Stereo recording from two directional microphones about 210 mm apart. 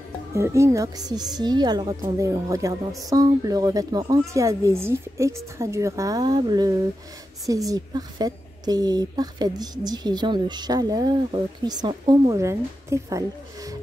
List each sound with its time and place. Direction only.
0.3 s a woman's voice: 15° right (ahead or behind)